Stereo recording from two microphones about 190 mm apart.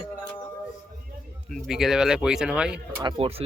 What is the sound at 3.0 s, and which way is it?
Speech, 30° right (ahead or behind).